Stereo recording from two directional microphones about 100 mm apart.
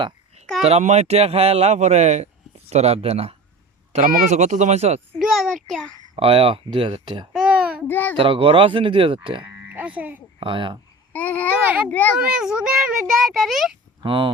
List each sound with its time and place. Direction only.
0.6 s speech: 90° right
4.7 s speech: 90° right
5.2 s a child's voice: centre (ahead or behind)
6.1 s speech: 70° right (ahead or behind); by 7.3 s 55° right (ahead or behind)
7.3 s babbling: 10° right (ahead or behind)
7.9 s a child's voice: 20° left (ahead or behind)
8.1 s speech: 65° right (ahead or behind)
9.4 s oink: 20° right (ahead or behind)
10.4 s speech: 55° right (ahead or behind)
11.1 s a child's voice: 15° left (ahead or behind)
11.6 s a child's voice: 15° right (ahead or behind)
11.9 s a child's voice: 15° left (ahead or behind)
12.2 s a child's voice: 5° right (ahead or behind)
14.0 s speech: 60° right (ahead or behind)